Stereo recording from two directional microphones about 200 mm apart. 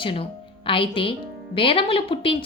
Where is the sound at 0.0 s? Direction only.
25° left (ahead or behind).